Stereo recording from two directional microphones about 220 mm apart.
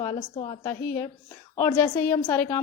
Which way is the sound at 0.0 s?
15° left (ahead or behind).